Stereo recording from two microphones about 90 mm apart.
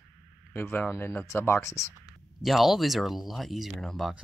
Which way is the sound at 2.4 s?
Centre (ahead or behind).